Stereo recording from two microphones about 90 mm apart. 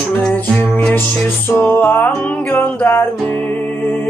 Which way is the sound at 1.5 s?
20° left (ahead or behind).